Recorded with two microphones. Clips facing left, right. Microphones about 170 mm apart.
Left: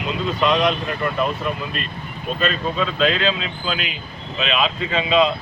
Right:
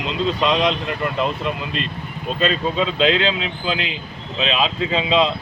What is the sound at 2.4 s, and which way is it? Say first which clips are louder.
Speech: right 2 dB; 25° right (ahead or behind).